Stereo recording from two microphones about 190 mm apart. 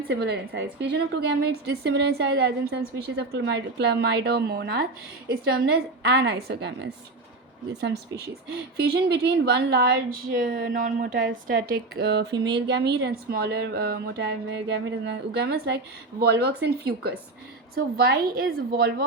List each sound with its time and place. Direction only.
0.1 s a woman's voice: 65° right (ahead or behind)